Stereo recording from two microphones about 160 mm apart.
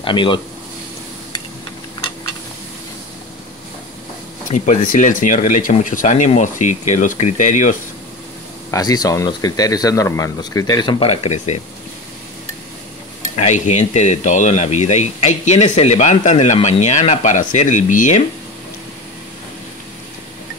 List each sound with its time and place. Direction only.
0.0 s speech: 30° left (ahead or behind)
4.5 s speech: 50° left (ahead or behind)
8.6 s speech: 20° left (ahead or behind); by 11.6 s 45° left (ahead or behind)
13.4 s speech: 45° left (ahead or behind)